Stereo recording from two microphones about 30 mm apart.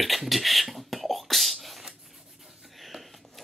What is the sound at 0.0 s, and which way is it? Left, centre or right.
Beatboxing, centre.